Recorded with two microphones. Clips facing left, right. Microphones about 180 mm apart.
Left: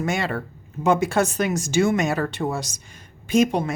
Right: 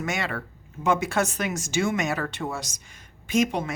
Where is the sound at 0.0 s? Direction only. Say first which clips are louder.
Left 5 dB; 30° left (ahead or behind).